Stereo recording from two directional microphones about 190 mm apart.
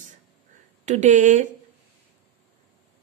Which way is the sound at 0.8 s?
40° right (ahead or behind).